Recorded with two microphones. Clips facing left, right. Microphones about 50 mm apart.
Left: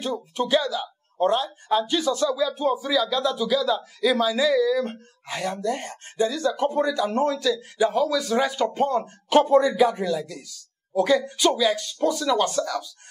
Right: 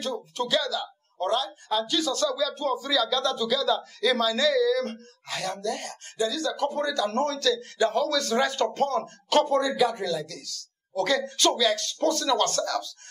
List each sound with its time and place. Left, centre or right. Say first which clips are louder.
0.0 s speech: left 3 dB; left